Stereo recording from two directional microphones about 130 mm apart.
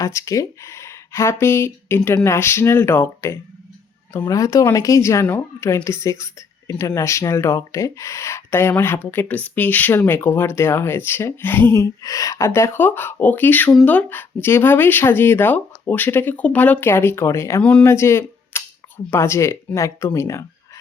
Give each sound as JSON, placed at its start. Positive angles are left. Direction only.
{"t": 0.0, "sound": "speech", "side_deg": 25}
{"t": 17.6, "sound": "speech", "side_deg": 10}
{"t": 17.8, "sound": "speech", "side_deg": 20}